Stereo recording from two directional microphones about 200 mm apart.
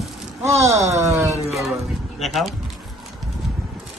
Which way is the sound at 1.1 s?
15° right (ahead or behind).